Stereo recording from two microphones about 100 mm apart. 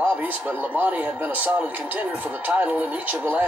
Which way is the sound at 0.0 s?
15° right (ahead or behind).